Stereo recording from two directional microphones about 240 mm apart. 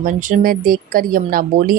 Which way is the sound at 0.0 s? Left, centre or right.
Right.